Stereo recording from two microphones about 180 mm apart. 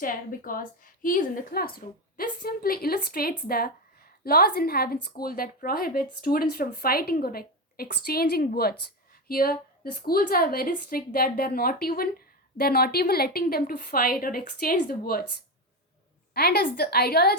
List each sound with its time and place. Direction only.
0.0 s a woman's voice: 50° left (ahead or behind)
16.3 s a woman's voice: 60° left (ahead or behind)